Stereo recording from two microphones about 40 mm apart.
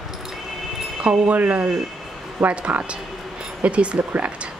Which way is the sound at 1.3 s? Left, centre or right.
Right.